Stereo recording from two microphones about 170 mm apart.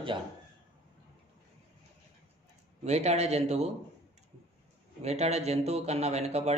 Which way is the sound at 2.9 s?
40° right (ahead or behind).